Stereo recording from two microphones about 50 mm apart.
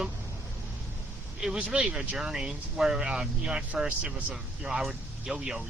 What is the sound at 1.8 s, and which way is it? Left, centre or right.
Speech, centre.